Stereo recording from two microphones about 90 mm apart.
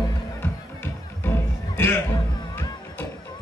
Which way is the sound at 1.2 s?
25° left (ahead or behind).